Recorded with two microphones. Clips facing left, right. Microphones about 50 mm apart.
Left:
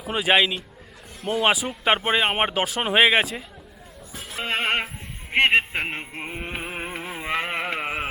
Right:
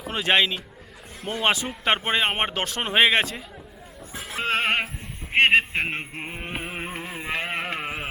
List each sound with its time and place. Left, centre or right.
0.0 s speech: centre
4.2 s goat: centre
5.3 s music: centre
7.2 s a sound: centre